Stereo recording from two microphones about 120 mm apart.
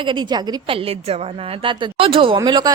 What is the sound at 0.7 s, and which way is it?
Speech, 50° right (ahead or behind).